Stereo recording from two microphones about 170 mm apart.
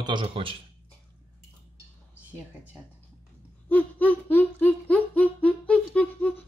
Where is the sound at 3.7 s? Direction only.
10° left (ahead or behind).